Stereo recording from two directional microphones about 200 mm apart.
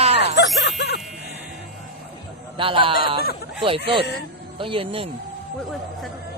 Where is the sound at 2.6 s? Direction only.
25° right (ahead or behind).